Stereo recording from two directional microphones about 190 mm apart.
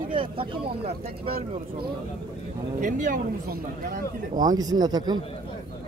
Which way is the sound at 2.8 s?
45° right (ahead or behind).